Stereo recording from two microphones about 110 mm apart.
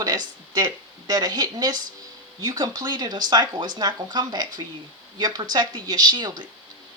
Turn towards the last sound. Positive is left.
turn(degrees=-40)  # may be behind; listen again after turning